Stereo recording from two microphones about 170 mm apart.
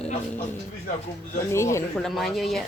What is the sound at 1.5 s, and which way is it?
Speech, 15° left (ahead or behind).